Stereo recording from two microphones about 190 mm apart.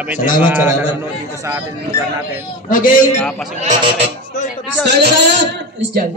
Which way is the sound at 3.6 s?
35° right (ahead or behind).